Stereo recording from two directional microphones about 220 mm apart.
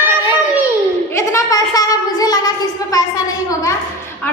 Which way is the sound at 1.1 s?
15° left (ahead or behind).